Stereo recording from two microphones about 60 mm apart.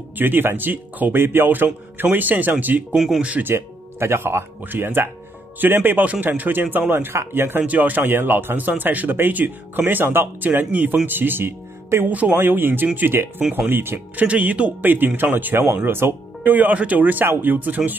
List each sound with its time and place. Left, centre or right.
0.2 s speech: right
3.4 s speech: right
7.6 s speech: right
12.1 s speech: right
14.2 s speech: right